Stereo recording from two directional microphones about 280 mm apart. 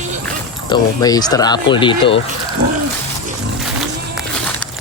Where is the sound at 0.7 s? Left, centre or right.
Centre.